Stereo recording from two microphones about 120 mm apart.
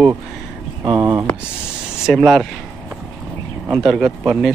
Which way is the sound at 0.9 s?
25° right (ahead or behind).